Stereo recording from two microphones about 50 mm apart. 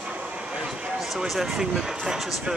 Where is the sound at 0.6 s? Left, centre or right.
Centre.